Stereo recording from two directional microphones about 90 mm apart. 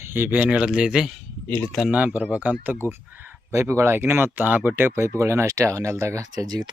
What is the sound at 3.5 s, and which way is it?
Speech, 30° right (ahead or behind).